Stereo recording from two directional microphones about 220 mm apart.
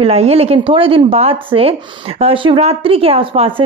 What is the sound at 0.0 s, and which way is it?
Speech, 30° right (ahead or behind).